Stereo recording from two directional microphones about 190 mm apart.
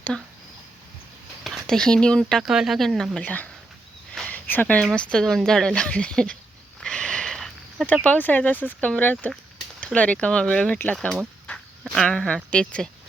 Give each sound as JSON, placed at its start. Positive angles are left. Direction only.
{"t": 1.5, "sound": "speech", "side_deg": 5}
{"t": 6.7, "sound": "a sound", "side_deg": 5}
{"t": 8.0, "sound": "speech", "side_deg": 10}